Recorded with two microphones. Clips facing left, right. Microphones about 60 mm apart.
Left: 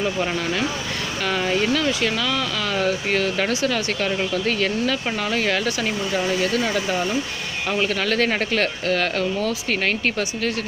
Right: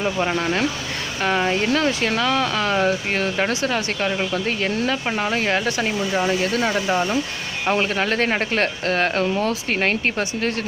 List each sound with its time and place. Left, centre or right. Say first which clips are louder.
0.0 s speech: right 2 dB; right
1.7 s speech: right 1 dB; right